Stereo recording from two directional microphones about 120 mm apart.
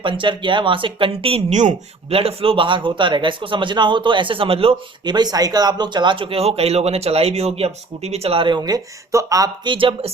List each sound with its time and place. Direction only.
0.0 s speech: 45° right (ahead or behind)
1.5 s speech: 65° right (ahead or behind); by 5.1 s 50° right (ahead or behind)
5.1 s speech: 35° right (ahead or behind)
9.7 s speech: 45° right (ahead or behind)